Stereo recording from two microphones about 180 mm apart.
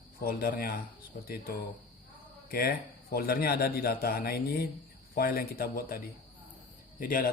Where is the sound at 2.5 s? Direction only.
55° left (ahead or behind).